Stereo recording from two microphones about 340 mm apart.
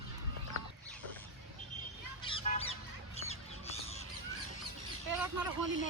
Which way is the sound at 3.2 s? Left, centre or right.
Centre.